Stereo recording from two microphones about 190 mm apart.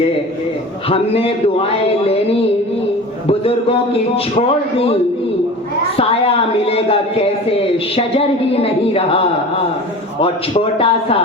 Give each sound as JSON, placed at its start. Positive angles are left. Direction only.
{"t": 0.9, "sound": "a man's voice", "side_deg": 30}
{"t": 3.2, "sound": "speech", "side_deg": 30}
{"t": 6.0, "sound": "a man's voice", "side_deg": 30}